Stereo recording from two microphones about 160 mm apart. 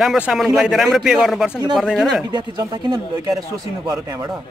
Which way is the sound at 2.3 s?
25° right (ahead or behind).